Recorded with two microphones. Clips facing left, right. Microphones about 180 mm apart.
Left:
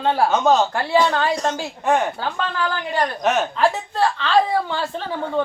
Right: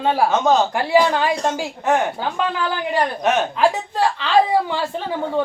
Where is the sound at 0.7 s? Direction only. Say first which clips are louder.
Right 2 dB; 15° right (ahead or behind).